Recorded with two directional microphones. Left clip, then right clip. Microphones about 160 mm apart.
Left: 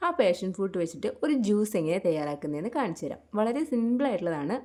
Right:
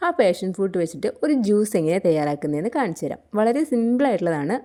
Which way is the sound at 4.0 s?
35° right (ahead or behind).